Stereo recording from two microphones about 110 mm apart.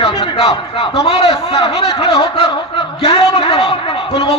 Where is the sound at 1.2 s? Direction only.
70° left (ahead or behind).